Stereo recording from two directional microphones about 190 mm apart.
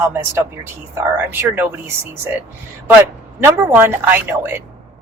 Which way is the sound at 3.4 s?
10° right (ahead or behind).